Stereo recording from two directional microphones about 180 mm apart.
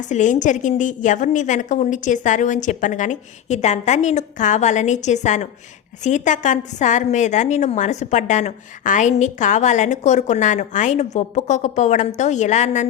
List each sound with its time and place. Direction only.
0.0 s a woman's voice: 45° left (ahead or behind)